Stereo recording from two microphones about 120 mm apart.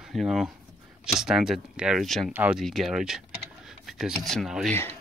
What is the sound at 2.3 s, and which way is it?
Speech, 15° right (ahead or behind).